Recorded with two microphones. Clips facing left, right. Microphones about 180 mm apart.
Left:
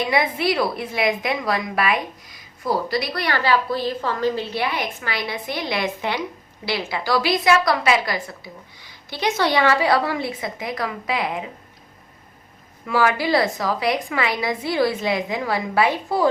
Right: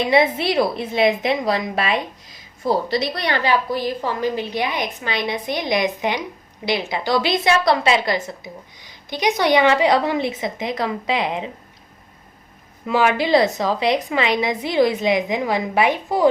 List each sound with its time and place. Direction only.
0.0 s a woman's voice: 25° right (ahead or behind)
12.8 s a woman's voice: 20° right (ahead or behind)